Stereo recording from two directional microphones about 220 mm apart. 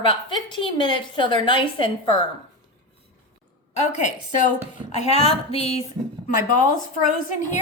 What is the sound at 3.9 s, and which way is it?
A woman's voice, 35° left (ahead or behind).